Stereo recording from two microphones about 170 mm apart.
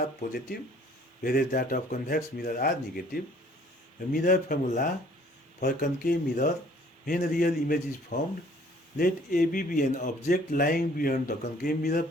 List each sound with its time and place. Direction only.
1.2 s speech: 60° left (ahead or behind)